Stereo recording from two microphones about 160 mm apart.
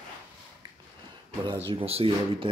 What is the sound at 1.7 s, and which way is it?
Speech, 35° right (ahead or behind).